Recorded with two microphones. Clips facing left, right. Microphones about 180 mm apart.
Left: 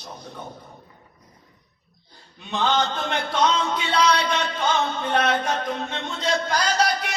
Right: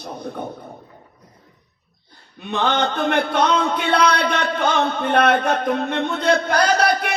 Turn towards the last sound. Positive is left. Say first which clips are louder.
# right 5 dB
turn(degrees=-60)  # may be behind; listen again after turning